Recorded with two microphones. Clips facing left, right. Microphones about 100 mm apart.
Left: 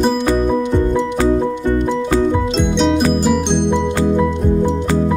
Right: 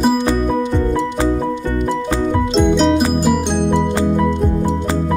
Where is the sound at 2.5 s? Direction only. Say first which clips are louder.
Right 2 dB; centre (ahead or behind).